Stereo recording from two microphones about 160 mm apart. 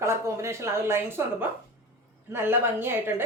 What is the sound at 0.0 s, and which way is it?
Speech, 15° right (ahead or behind).